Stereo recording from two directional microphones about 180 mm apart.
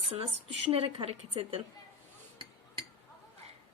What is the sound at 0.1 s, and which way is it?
Speech, 30° right (ahead or behind).